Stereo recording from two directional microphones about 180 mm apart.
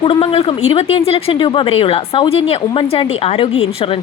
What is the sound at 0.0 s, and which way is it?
A woman's voice, 30° left (ahead or behind).